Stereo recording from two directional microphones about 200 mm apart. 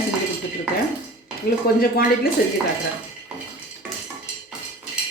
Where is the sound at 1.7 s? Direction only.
50° left (ahead or behind).